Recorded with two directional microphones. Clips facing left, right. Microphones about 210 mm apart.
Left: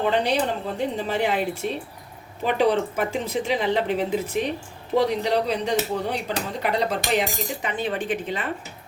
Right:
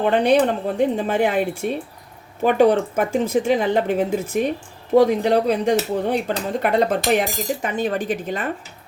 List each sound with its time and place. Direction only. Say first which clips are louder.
0.0 s speech: right 6 dB; 50° right (ahead or behind)